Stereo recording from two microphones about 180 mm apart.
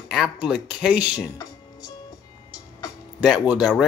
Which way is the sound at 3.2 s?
5° right (ahead or behind).